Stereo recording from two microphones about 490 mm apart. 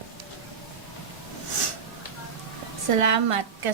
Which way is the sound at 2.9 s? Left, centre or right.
Right.